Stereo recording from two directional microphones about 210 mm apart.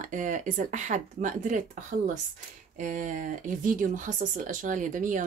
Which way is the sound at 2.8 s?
40° right (ahead or behind).